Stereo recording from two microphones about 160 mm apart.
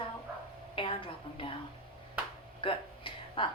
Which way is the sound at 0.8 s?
35° left (ahead or behind).